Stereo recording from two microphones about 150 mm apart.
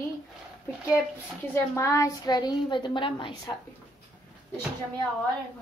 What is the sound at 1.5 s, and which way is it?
A woman's voice, 20° left (ahead or behind).